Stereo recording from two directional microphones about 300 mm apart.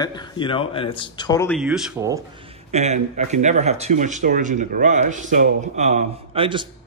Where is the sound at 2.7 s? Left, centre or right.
Right.